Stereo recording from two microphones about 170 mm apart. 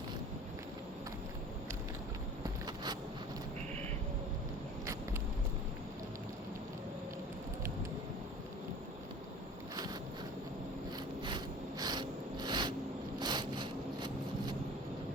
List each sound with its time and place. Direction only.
2.6 s vehicle: 25° right (ahead or behind)
11.3 s snort: 25° right (ahead or behind)
13.1 s sawing: 25° right (ahead or behind)